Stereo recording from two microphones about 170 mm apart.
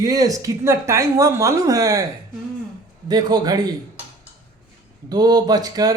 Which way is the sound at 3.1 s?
25° right (ahead or behind).